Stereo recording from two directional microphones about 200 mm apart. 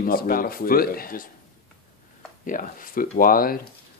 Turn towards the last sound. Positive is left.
turn(degrees=45)  # may be behind; listen again after turning